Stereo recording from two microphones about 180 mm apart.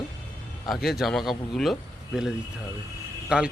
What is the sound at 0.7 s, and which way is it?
Speech, centre (ahead or behind).